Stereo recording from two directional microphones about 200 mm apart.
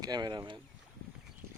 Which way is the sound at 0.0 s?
20° right (ahead or behind).